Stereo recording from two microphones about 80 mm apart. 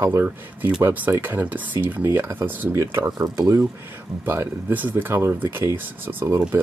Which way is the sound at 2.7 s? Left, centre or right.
Right.